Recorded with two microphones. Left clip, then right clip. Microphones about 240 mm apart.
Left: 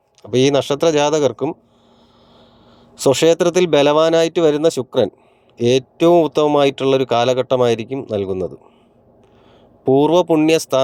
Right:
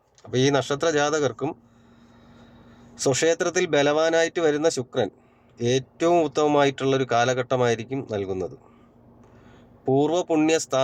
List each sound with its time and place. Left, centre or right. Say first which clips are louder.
0.2 s speech: left 7 dB; centre
2.9 s speech: left 8 dB; centre
9.8 s speech: left 9 dB; centre